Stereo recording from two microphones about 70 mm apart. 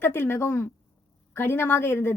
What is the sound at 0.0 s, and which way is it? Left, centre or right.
Speech, left.